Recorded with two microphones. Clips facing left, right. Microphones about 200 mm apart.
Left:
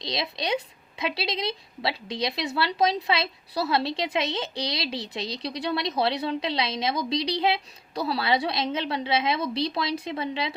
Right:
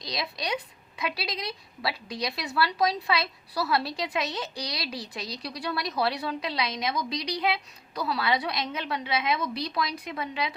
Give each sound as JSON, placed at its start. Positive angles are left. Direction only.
{"t": 0.0, "sound": "a woman's voice", "side_deg": 25}